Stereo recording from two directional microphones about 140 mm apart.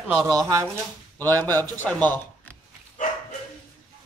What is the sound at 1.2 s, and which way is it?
Speech, 15° left (ahead or behind).